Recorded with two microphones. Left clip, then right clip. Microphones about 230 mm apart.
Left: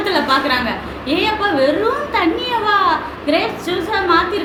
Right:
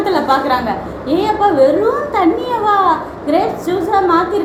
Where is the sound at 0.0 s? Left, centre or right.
Centre.